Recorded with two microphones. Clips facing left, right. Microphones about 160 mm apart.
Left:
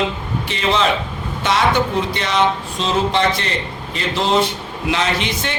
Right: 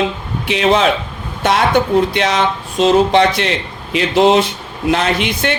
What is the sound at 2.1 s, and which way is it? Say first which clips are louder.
Speech: right 6 dB; 90° right.